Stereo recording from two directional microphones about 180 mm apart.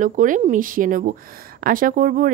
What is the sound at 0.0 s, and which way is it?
Speech, 45° right (ahead or behind).